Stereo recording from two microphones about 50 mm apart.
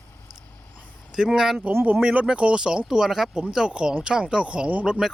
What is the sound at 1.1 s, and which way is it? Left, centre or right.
Speech, centre.